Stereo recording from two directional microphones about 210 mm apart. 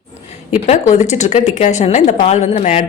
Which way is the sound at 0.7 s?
35° left (ahead or behind).